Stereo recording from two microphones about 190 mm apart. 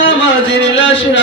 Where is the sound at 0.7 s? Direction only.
75° left (ahead or behind).